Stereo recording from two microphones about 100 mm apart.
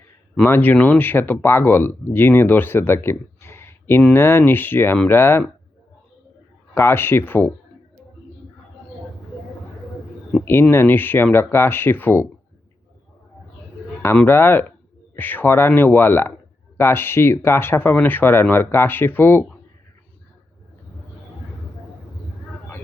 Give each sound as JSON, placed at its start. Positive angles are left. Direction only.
{"t": 0.4, "sound": "speech", "side_deg": 20}
{"t": 6.7, "sound": "speech", "side_deg": 25}
{"t": 10.4, "sound": "speech", "side_deg": 25}
{"t": 14.3, "sound": "speech", "side_deg": 25}